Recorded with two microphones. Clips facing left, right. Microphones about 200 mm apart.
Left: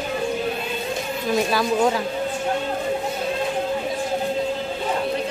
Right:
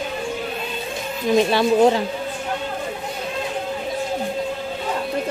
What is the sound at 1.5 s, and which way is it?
Speech, 25° right (ahead or behind).